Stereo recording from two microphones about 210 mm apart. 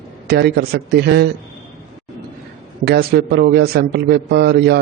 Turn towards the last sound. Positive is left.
turn(degrees=-50)  # may be behind; listen again after turning